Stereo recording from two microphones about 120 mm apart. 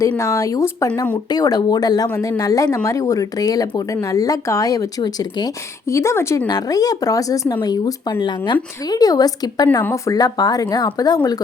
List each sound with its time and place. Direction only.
0.2 s speech: 25° left (ahead or behind)